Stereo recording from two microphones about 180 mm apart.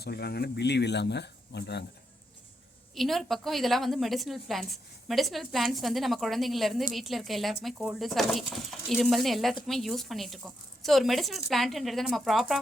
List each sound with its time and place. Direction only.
0.0 s speech: 60° left (ahead or behind)
2.9 s a woman's voice: centre (ahead or behind)